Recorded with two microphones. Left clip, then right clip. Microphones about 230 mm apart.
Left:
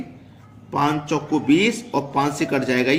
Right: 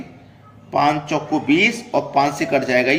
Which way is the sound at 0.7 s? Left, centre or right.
Left.